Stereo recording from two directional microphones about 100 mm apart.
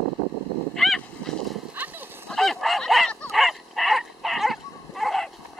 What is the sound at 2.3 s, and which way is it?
Bow-wow, 5° left (ahead or behind).